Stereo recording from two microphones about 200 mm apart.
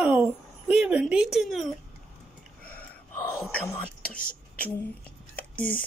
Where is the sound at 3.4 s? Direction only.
5° left (ahead or behind).